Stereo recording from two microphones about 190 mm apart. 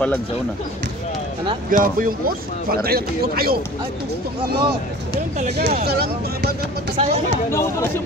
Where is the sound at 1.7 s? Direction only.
45° right (ahead or behind).